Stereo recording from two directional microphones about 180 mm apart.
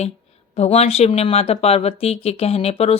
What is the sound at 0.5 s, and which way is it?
Speech, 35° left (ahead or behind).